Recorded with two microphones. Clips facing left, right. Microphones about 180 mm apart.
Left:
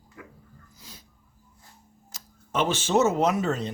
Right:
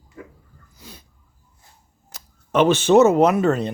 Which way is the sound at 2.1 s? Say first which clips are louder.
Right 9 dB; 65° right (ahead or behind).